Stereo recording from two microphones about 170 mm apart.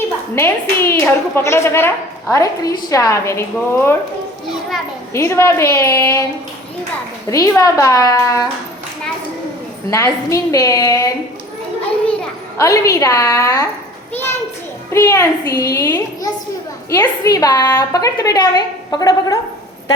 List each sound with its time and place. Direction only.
0.3 s a woman's voice: 15° left (ahead or behind)
5.1 s a woman's voice: 15° left (ahead or behind)
7.3 s a woman's voice: 20° left (ahead or behind)
9.9 s a woman's voice: 15° left (ahead or behind)
12.5 s a woman's voice: 20° left (ahead or behind)
14.9 s a woman's voice: 15° left (ahead or behind)